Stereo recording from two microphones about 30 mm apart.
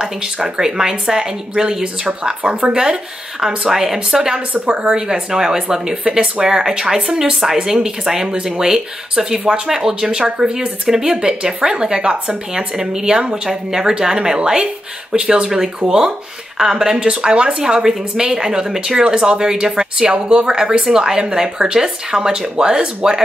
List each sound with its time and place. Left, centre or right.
0.0 s speech: centre
3.3 s speech: centre
15.8 s speech: right
16.5 s speech: centre